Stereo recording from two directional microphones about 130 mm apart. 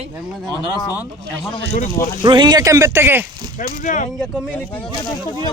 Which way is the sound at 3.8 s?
75° left (ahead or behind).